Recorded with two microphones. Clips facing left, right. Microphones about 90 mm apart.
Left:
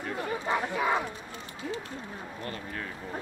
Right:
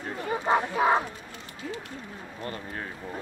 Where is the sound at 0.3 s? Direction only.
35° right (ahead or behind).